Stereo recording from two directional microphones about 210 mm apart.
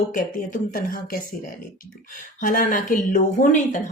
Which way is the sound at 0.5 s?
40° left (ahead or behind).